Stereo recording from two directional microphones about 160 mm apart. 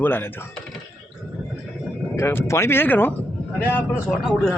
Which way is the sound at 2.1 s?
15° left (ahead or behind).